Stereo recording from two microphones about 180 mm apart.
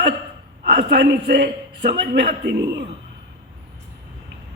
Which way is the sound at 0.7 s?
65° right (ahead or behind).